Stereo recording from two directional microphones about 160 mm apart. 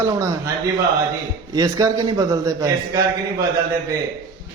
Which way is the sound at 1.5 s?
25° right (ahead or behind).